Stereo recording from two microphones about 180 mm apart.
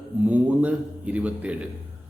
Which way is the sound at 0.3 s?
10° right (ahead or behind).